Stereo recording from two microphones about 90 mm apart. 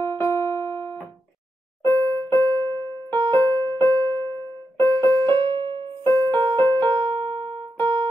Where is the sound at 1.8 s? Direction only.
30° left (ahead or behind).